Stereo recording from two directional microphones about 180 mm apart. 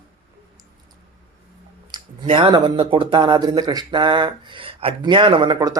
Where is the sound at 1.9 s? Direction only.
25° right (ahead or behind).